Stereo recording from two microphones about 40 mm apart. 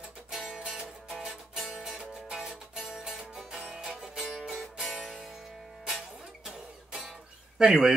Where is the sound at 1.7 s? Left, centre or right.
Centre.